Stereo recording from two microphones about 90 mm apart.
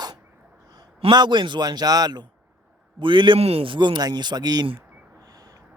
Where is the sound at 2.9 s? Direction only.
65° right (ahead or behind); by 4.6 s 50° right (ahead or behind).